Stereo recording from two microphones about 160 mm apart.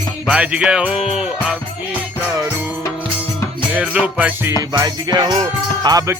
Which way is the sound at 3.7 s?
5° right (ahead or behind).